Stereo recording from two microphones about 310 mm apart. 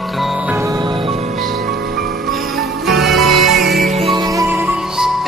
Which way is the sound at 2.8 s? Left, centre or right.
Centre.